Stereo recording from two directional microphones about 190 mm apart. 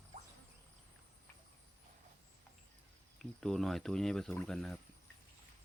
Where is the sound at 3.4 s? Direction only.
Centre (ahead or behind).